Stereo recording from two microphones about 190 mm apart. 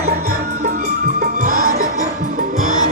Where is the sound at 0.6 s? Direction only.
45° right (ahead or behind).